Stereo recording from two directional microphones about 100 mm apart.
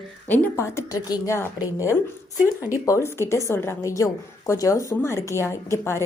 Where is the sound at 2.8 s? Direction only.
30° left (ahead or behind).